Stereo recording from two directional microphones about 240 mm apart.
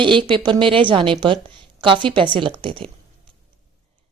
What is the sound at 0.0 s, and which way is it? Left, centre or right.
A woman's voice, centre.